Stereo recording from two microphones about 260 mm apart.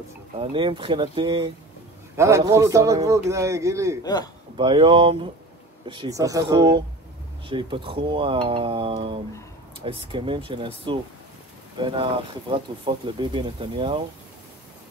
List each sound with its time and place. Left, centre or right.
0.4 s speech: centre
4.0 s a man's voice: centre
4.6 s speech: centre